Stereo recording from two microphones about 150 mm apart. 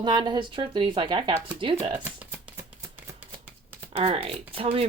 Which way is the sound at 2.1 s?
10° right (ahead or behind).